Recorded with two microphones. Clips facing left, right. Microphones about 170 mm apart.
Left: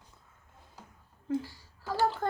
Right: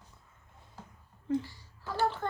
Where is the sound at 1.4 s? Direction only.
40° left (ahead or behind).